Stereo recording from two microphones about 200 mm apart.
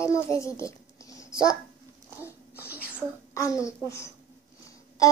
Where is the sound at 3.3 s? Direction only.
15° left (ahead or behind).